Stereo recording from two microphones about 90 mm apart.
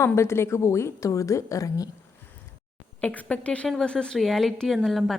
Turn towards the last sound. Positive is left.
turn(degrees=0)  # may be behind; listen again after turning